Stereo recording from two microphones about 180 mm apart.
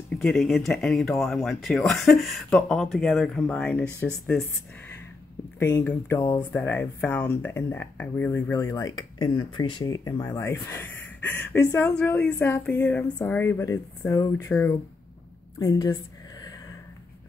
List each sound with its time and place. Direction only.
0.1 s speech: centre (ahead or behind)
5.6 s speech: 10° left (ahead or behind)
15.6 s a sound: 20° left (ahead or behind)